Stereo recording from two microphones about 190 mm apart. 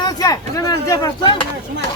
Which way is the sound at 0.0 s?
20° left (ahead or behind).